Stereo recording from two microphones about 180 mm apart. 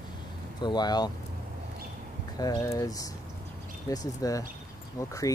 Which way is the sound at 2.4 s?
20° left (ahead or behind).